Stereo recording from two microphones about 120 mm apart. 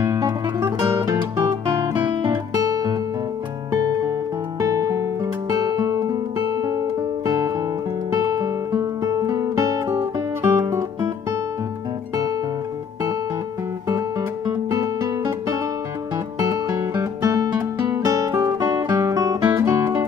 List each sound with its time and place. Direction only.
0.0 s music: 25° right (ahead or behind)
2.0 s guitar: 25° right (ahead or behind)
3.7 s music: 25° right (ahead or behind)
6.6 s guitar: 30° right (ahead or behind)
8.1 s music: 30° right (ahead or behind)
13.8 s music: 30° right (ahead or behind)
16.3 s music: 30° right (ahead or behind)
18.3 s music: 15° right (ahead or behind)
18.6 s music: 35° right (ahead or behind)